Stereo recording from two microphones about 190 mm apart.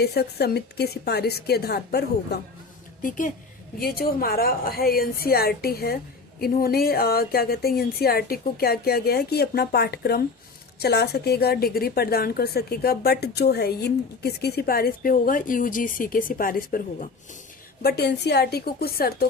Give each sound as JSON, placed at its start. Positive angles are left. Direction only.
{"t": 0.0, "sound": "a woman's voice", "side_deg": 55}
{"t": 3.0, "sound": "a woman's voice", "side_deg": 45}
{"t": 17.8, "sound": "a woman's voice", "side_deg": 60}